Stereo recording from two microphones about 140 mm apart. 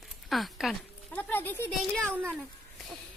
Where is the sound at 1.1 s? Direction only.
15° left (ahead or behind).